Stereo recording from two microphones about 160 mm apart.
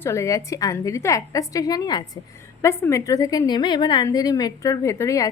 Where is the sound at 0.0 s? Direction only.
20° left (ahead or behind).